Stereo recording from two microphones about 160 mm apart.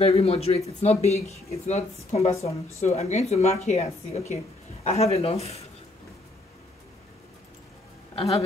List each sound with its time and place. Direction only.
0.0 s speech: 40° left (ahead or behind)